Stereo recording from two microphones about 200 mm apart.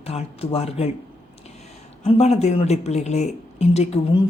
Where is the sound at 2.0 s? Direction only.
30° left (ahead or behind).